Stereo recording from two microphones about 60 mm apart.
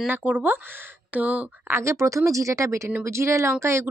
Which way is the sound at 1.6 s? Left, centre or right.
Right.